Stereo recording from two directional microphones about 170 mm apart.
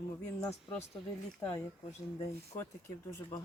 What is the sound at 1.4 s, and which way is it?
Speech, 15° left (ahead or behind).